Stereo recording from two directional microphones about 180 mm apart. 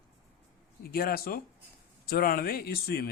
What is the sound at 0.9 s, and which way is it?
Speech, 55° left (ahead or behind).